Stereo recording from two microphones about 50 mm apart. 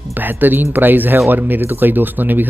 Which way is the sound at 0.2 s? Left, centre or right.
Right.